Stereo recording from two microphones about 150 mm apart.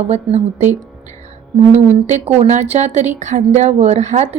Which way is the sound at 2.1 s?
50° right (ahead or behind).